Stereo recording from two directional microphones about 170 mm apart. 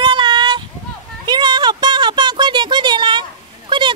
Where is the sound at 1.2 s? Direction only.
25° right (ahead or behind).